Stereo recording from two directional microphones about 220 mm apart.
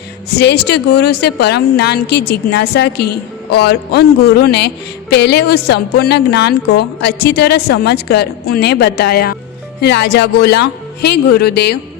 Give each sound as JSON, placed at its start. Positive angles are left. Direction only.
{"t": 0.3, "sound": "a woman's voice", "side_deg": 50}